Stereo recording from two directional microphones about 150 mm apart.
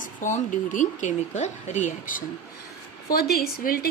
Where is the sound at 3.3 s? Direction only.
80° left.